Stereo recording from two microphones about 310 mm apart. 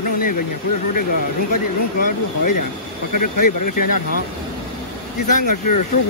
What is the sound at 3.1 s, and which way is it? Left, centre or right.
Speech, left.